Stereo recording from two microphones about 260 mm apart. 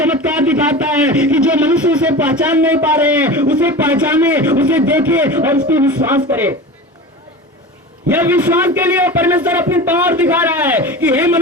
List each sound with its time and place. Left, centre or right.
0.0 s a sound: centre
0.9 s a man's voice: centre
8.1 s a man's voice: centre